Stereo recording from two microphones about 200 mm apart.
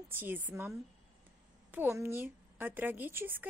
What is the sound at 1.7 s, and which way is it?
A woman's voice, 10° right (ahead or behind).